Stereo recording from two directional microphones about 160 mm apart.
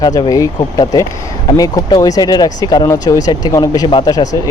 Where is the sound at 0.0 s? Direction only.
25° left (ahead or behind).